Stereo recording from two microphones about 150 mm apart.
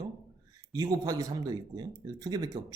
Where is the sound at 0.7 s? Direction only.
25° right (ahead or behind).